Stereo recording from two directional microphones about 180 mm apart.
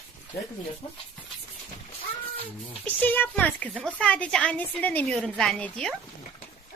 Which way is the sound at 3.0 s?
10° left (ahead or behind).